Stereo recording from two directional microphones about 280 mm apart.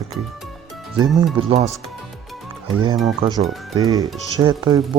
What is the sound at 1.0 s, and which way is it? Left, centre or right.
Speech, centre.